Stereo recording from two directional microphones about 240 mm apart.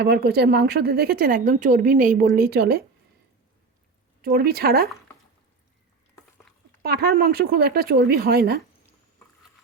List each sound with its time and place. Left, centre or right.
0.0 s speech: right
4.2 s speech: right
6.8 s speech: right